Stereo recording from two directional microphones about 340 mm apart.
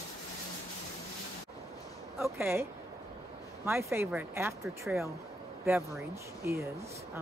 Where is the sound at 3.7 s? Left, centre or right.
Centre.